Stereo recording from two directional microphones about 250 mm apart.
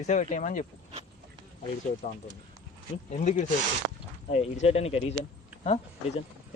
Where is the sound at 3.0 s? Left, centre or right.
Left.